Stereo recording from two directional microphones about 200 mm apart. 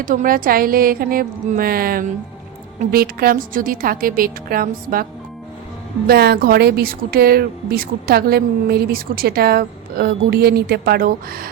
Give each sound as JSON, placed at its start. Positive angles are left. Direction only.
{"t": 0.0, "sound": "speech", "side_deg": -40}
{"t": 6.1, "sound": "speech", "side_deg": -50}